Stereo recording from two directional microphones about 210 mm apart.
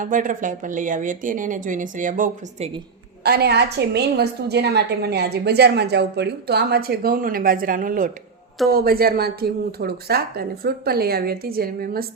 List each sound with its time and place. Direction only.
0.0 s a woman's voice: 40° right (ahead or behind)
3.2 s a woman's voice: 50° right (ahead or behind)